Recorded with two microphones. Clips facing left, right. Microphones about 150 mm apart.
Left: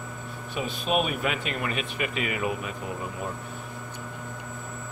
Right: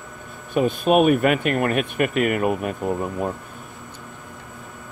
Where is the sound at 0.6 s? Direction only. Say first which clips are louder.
Right 10 dB; 50° right (ahead or behind).